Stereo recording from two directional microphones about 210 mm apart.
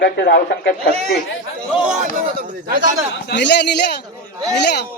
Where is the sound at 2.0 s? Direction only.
40° right (ahead or behind).